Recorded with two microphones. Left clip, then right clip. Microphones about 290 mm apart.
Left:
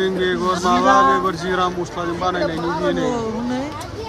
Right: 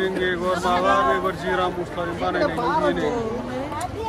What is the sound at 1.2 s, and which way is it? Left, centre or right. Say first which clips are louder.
Speech: left 3 dB; centre.